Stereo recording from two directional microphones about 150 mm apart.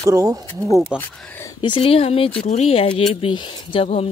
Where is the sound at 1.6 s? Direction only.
35° left (ahead or behind).